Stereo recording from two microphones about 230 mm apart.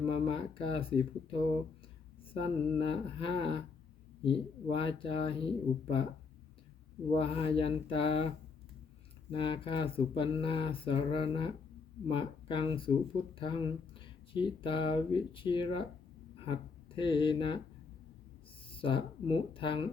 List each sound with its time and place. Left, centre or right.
0.1 s speech: left
7.1 s speech: left
9.3 s speech: left
18.7 s speech: left